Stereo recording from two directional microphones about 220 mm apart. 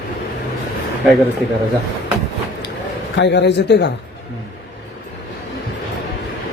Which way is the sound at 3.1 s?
50° left (ahead or behind).